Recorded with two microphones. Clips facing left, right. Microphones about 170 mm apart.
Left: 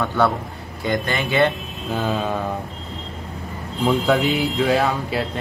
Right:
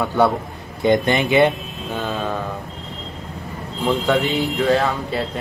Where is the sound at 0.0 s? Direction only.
15° right (ahead or behind).